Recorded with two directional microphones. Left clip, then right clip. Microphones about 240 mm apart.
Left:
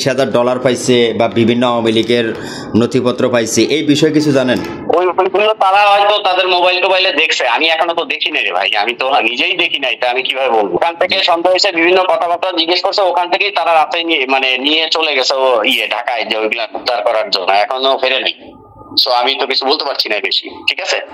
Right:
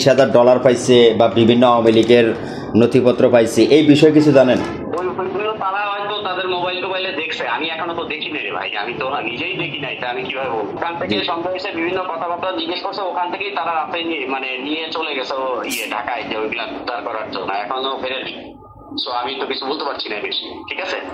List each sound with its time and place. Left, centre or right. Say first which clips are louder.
0.1 s a man's voice: right 3 dB; left
4.9 s speech: left 11 dB; left